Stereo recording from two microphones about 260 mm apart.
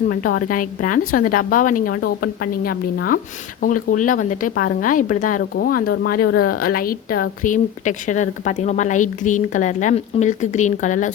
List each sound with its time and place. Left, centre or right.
0.1 s a woman's voice: left
6.2 s speech: left
6.6 s a woman's voice: left